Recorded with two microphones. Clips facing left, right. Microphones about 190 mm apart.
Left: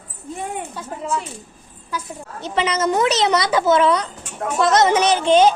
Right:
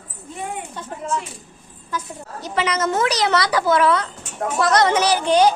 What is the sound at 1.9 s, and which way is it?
Speech, 10° left (ahead or behind).